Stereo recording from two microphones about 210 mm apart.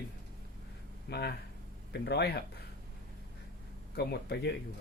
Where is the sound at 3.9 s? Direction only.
50° left (ahead or behind).